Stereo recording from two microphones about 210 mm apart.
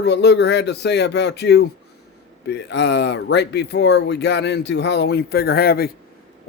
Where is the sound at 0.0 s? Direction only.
55° left (ahead or behind).